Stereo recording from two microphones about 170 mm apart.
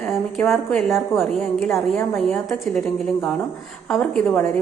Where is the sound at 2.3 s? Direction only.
Centre (ahead or behind).